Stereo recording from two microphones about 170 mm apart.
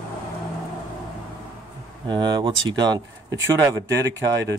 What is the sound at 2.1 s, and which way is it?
Speech, 25° right (ahead or behind).